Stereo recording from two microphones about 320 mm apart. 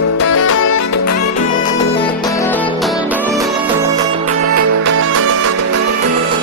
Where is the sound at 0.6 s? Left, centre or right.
Left.